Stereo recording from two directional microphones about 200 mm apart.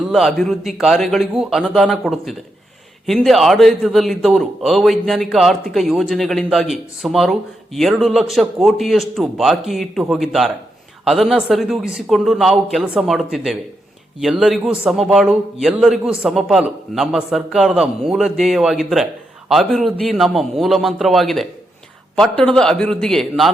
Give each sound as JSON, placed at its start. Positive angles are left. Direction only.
{"t": 0.0, "sound": "a man's voice", "side_deg": 0}